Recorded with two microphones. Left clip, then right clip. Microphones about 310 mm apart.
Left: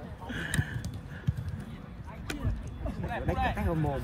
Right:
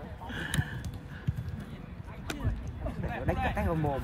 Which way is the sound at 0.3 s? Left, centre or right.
Centre.